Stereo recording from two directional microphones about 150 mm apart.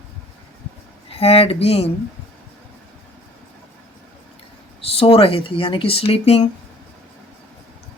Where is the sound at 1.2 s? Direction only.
40° left (ahead or behind).